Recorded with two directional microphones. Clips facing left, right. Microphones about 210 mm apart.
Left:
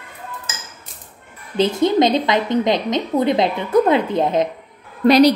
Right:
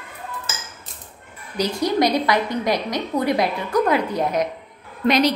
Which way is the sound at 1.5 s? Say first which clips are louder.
Left 5 dB; 25° left (ahead or behind).